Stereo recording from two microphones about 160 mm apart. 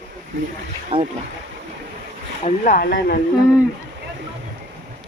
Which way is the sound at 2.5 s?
55° left (ahead or behind).